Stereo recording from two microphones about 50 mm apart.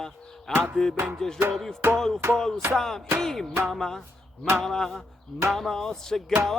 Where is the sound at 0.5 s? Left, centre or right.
Centre.